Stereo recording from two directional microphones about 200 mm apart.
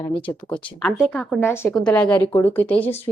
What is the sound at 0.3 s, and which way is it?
A woman's voice, 5° left (ahead or behind).